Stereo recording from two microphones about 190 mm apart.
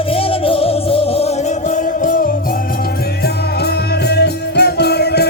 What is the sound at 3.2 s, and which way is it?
Music, 55° left (ahead or behind).